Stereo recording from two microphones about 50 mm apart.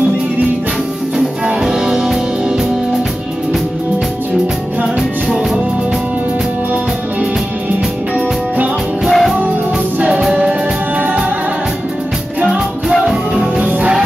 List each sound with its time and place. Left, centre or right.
1.6 s music: centre
9.0 s music: centre
9.9 s music: right
12.4 s music: centre
13.7 s music: right